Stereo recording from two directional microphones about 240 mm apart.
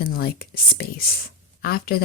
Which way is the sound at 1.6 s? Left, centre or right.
Left.